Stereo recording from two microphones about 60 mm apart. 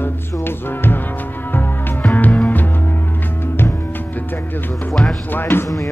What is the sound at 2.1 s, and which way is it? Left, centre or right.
Music, left.